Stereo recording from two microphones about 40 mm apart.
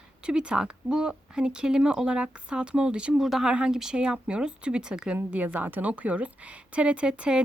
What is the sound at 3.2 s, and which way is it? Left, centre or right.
Speech, centre.